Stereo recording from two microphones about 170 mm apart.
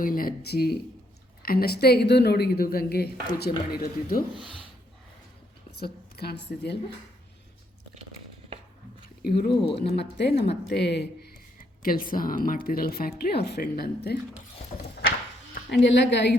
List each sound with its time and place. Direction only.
0.0 s a woman's voice: 55° left (ahead or behind)
5.8 s a woman's voice: 70° left (ahead or behind)
9.2 s a woman's voice: 65° left (ahead or behind)
10.5 s speech: 90° left
11.8 s speech: 55° left (ahead or behind)
15.7 s a woman's voice: 90° left